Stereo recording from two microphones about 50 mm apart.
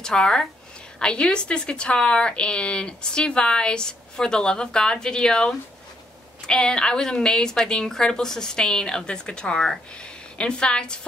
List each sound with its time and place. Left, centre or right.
0.0 s a woman's voice: centre